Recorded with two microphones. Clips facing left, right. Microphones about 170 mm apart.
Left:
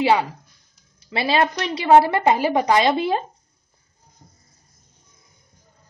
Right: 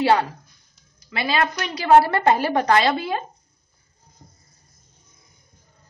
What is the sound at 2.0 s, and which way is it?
Speech, 15° left (ahead or behind).